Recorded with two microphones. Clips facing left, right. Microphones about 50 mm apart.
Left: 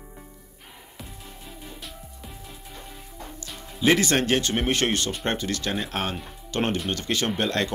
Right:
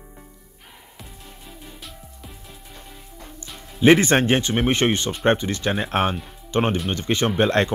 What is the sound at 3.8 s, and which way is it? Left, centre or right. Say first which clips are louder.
Speech: right 6 dB; right.